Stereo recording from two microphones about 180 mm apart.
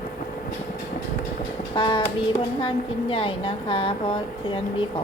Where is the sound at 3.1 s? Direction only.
30° left (ahead or behind).